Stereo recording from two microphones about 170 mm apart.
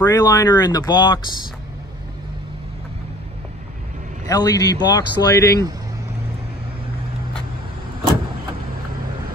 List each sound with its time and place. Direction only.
0.0 s speech: 20° left (ahead or behind)
4.3 s speech: 20° left (ahead or behind)